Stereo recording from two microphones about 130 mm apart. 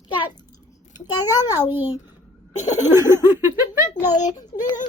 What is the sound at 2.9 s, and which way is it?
Giggle, 20° right (ahead or behind).